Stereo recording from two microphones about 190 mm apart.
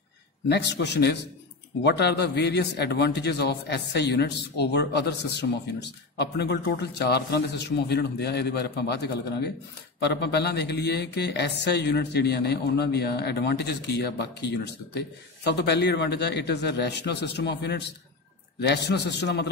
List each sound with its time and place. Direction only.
0.5 s a man's voice: 65° left (ahead or behind)